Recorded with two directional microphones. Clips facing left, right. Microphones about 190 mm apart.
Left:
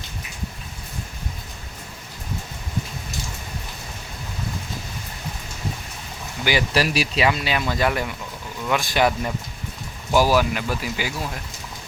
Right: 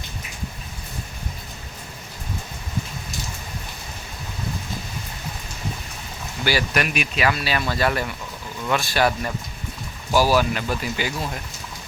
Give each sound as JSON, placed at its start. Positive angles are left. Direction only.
{"t": 6.4, "sound": "speech", "side_deg": 20}
{"t": 6.7, "sound": "speech", "side_deg": 35}
{"t": 7.3, "sound": "speech", "side_deg": 20}